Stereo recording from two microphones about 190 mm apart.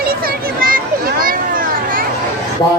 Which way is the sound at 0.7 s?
50° right (ahead or behind).